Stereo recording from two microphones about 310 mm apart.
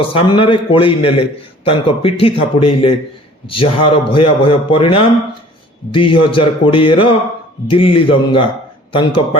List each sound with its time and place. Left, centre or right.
0.0 s a man's voice: centre